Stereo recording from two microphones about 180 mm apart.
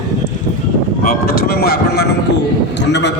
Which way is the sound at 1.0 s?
55° left (ahead or behind).